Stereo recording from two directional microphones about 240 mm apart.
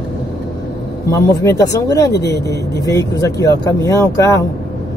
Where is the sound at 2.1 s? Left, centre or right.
Left.